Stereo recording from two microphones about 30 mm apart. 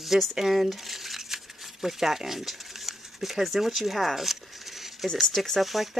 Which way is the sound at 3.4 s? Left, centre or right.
Centre.